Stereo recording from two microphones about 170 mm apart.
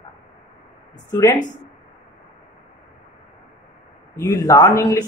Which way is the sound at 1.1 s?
20° left (ahead or behind).